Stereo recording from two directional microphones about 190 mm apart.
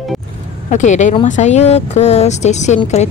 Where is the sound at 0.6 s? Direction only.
40° left (ahead or behind).